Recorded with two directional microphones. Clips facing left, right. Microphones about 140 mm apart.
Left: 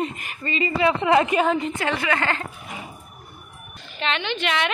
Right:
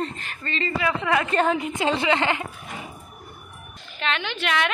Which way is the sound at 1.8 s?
20° right (ahead or behind).